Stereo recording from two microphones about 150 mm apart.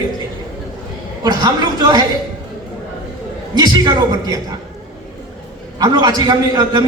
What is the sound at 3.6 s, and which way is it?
Speech, 30° right (ahead or behind).